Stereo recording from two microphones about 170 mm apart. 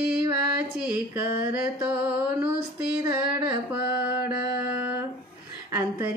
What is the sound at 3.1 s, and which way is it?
Singing, 15° right (ahead or behind).